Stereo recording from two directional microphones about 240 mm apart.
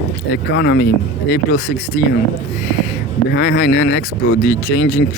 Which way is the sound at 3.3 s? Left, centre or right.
Left.